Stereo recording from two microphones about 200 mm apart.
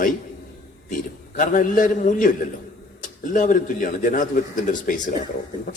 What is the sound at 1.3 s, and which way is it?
Speech, 40° left (ahead or behind).